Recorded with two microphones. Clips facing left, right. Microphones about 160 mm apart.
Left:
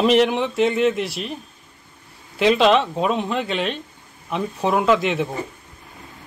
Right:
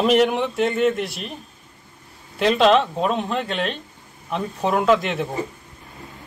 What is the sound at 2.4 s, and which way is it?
Speech, centre (ahead or behind).